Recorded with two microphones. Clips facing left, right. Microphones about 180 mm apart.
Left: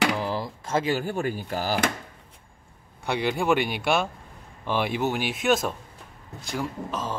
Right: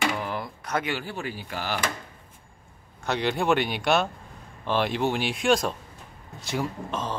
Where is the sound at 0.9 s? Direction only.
45° left (ahead or behind).